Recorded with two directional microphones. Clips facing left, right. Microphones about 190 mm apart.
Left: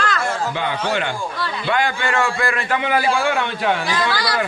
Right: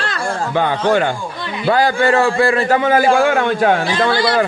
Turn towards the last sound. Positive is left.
turn(degrees=-25)  # may be behind; listen again after turning